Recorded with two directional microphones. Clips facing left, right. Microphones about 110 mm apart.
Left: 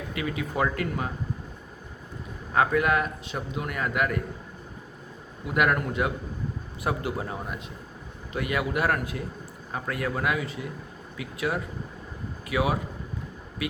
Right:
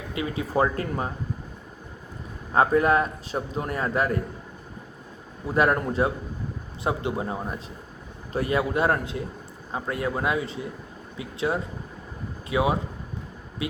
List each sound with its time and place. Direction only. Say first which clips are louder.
0.1 s speech: right 4 dB; 25° right (ahead or behind)
2.5 s a man's voice: right 3 dB; 30° right (ahead or behind)
5.5 s a man's voice: right 2 dB; 30° right (ahead or behind)